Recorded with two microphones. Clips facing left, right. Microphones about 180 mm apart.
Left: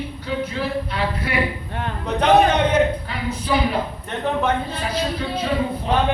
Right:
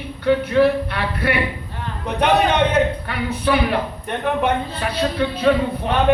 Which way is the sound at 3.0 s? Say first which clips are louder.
Right 3 dB; 65° right (ahead or behind).